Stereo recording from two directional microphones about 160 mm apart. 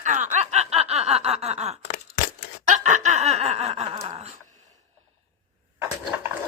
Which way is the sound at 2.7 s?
45° right (ahead or behind).